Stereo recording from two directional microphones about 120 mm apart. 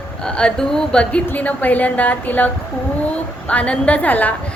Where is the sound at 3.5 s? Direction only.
10° left (ahead or behind).